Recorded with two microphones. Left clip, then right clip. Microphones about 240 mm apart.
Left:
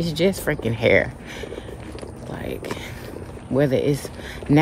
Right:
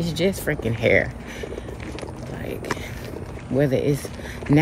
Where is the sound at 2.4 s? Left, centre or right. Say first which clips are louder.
Right 2 dB; centre.